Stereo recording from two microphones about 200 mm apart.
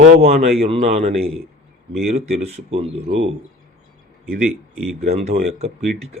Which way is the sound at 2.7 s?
30° right (ahead or behind).